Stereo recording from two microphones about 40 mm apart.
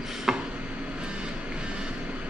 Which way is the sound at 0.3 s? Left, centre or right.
Centre.